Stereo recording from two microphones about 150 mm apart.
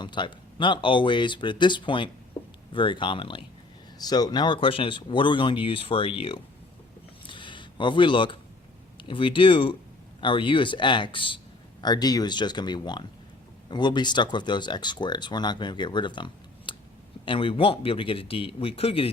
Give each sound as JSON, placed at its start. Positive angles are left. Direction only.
{"t": 0.0, "sound": "speech", "side_deg": 30}
{"t": 7.3, "sound": "a sound", "side_deg": 35}
{"t": 9.0, "sound": "speech", "side_deg": 35}